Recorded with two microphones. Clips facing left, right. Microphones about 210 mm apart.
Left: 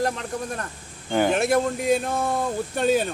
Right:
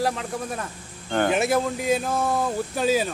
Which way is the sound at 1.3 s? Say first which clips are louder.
Left 1 dB; centre (ahead or behind).